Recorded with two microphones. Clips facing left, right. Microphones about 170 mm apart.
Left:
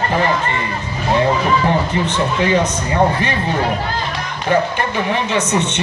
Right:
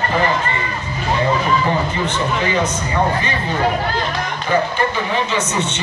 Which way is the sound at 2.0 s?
65° left (ahead or behind).